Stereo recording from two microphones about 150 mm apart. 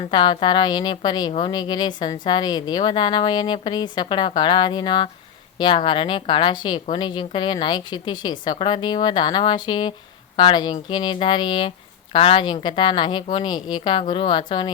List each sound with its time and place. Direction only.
0.0 s a woman's voice: 30° left (ahead or behind)